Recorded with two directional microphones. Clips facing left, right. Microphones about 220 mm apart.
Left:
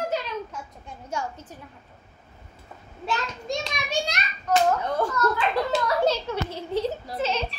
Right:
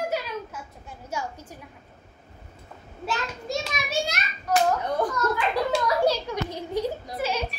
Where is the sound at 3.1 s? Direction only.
5° right (ahead or behind).